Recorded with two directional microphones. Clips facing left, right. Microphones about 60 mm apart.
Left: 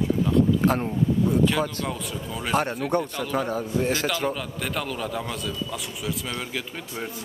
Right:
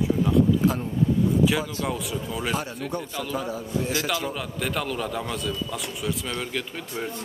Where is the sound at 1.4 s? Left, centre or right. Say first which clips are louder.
Even; centre.